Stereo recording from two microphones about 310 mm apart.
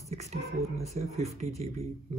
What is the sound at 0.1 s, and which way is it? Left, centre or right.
Speech, right.